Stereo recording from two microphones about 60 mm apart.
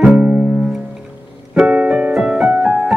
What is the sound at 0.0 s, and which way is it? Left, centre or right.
Music, centre.